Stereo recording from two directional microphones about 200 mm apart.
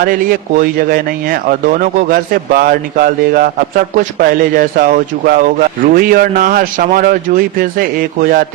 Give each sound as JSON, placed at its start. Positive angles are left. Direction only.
{"t": 0.0, "sound": "speech", "side_deg": -45}